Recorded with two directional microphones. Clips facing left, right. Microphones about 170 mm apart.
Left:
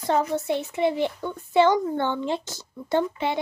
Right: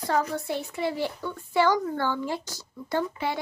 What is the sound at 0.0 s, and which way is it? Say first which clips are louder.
A child's voice: left 3 dB; 20° left (ahead or behind).